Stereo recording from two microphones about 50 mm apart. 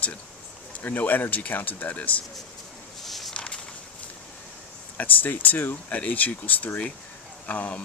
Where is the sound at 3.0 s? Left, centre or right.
Centre.